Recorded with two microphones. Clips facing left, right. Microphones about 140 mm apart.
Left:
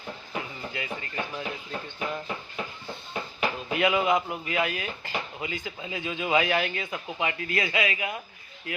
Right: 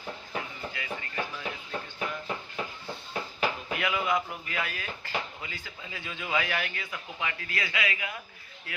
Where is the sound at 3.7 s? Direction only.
25° left (ahead or behind).